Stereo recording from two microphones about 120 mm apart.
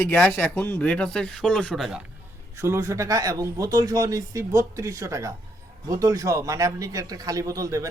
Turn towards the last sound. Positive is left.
turn(degrees=-30)  # may be behind; listen again after turning